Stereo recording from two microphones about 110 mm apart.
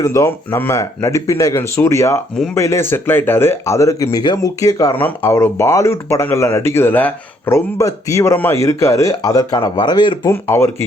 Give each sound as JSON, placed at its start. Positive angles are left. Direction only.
{"t": 0.0, "sound": "speech", "side_deg": 25}
{"t": 4.9, "sound": "speech", "side_deg": 20}
{"t": 9.8, "sound": "speech", "side_deg": 45}
{"t": 10.2, "sound": "speech", "side_deg": 25}